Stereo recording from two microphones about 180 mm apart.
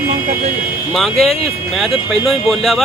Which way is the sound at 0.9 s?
Centre (ahead or behind).